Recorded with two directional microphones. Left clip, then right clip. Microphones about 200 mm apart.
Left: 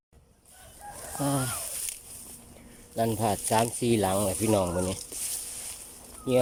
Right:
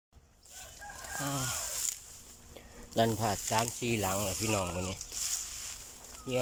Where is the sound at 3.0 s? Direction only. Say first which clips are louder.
Left 2 dB; 10° left (ahead or behind).